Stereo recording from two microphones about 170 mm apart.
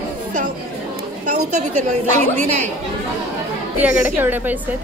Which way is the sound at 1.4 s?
45° right (ahead or behind).